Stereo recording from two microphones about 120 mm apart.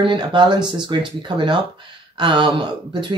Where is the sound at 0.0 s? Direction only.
40° right (ahead or behind).